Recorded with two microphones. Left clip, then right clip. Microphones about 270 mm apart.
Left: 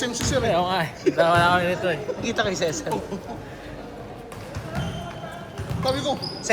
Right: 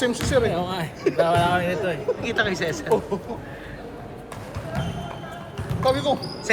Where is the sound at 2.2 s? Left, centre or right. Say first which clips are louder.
Left 1 dB; centre.